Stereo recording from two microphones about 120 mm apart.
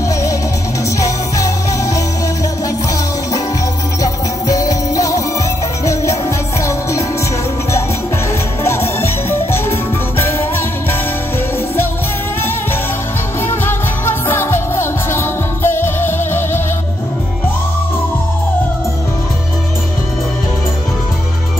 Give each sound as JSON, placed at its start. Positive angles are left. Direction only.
{"t": 4.0, "sound": "music", "side_deg": 30}
{"t": 6.6, "sound": "music", "side_deg": 25}
{"t": 8.6, "sound": "music", "side_deg": 20}
{"t": 13.4, "sound": "music", "side_deg": 20}